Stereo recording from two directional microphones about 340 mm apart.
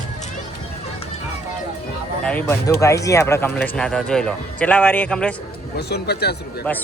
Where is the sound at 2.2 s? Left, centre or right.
Centre.